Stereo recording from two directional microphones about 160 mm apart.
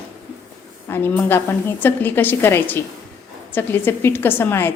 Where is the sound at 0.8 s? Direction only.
15° left (ahead or behind).